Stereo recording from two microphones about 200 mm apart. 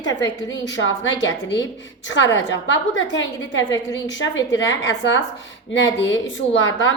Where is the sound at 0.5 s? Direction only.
65° left (ahead or behind).